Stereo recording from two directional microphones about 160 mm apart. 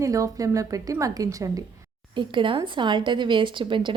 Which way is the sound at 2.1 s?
30° right (ahead or behind).